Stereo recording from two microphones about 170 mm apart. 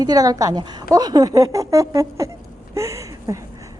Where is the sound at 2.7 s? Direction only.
15° right (ahead or behind).